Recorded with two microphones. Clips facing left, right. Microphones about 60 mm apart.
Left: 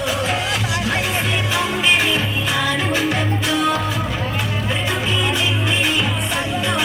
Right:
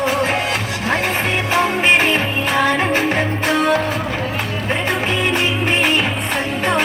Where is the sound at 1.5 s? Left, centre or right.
Right.